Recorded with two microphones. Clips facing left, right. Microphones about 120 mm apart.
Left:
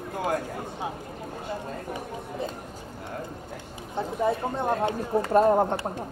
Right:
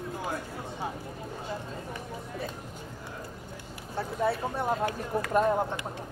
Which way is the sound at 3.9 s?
20° left (ahead or behind).